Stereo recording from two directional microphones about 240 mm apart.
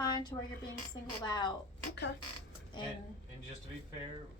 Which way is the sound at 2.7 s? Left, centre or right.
Centre.